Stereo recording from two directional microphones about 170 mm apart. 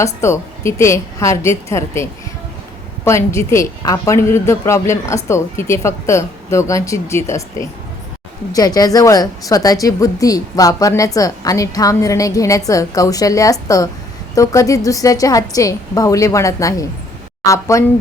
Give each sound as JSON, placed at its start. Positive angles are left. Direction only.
{"t": 0.0, "sound": "a woman's voice", "side_deg": 15}